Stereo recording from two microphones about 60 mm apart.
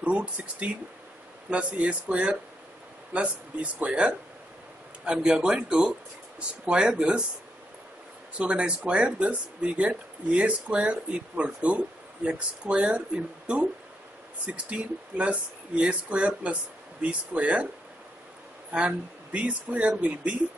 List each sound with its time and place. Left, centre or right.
0.0 s speech: centre
8.4 s speech: centre
18.7 s speech: right